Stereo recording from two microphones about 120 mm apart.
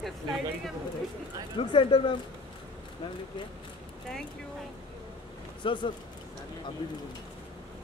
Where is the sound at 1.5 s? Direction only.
45° left (ahead or behind).